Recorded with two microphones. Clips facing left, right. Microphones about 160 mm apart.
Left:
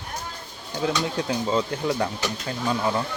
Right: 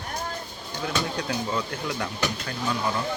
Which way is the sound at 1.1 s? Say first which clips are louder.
Left 4 dB; 25° left (ahead or behind).